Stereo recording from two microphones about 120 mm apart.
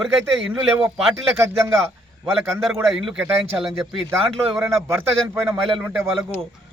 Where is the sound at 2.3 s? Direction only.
Centre (ahead or behind).